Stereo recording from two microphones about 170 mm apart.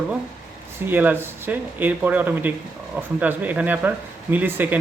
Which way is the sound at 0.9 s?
10° right (ahead or behind).